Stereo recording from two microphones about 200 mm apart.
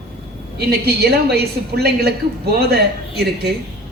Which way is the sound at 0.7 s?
55° right (ahead or behind).